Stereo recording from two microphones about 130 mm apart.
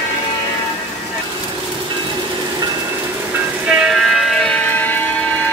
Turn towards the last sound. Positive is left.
turn(degrees=15)  # may be behind; listen again after turning